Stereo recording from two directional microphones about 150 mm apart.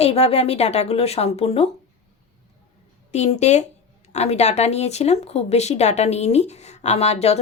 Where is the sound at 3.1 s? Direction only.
50° left (ahead or behind).